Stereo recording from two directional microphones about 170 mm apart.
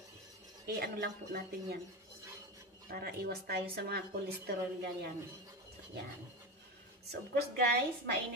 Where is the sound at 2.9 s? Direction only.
65° right (ahead or behind).